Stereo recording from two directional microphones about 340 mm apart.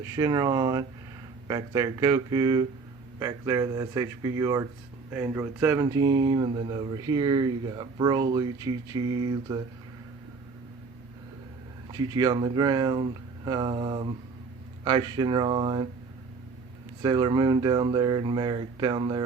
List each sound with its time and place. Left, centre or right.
0.0 s speech: centre
11.9 s speech: centre
17.0 s speech: centre